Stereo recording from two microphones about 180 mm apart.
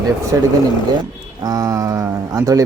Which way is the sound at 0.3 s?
15° right (ahead or behind).